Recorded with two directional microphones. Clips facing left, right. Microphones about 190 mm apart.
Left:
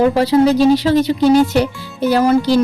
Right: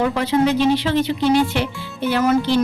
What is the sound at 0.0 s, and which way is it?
Speech, 35° left (ahead or behind).